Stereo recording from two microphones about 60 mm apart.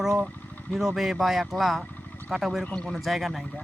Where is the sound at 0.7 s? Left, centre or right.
Centre.